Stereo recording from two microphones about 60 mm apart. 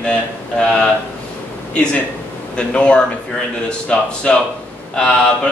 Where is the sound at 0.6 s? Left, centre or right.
Centre.